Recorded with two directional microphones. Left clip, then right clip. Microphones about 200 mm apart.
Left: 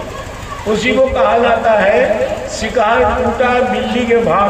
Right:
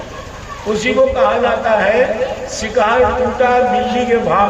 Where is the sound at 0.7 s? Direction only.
25° right (ahead or behind).